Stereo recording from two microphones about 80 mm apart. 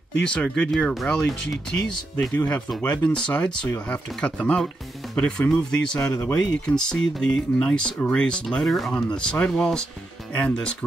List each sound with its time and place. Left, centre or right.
0.2 s speech: centre
2.3 s speech: left